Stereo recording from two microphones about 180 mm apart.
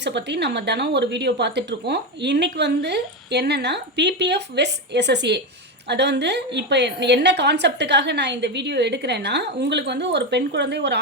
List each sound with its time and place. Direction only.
0.0 s speech: 70° right (ahead or behind)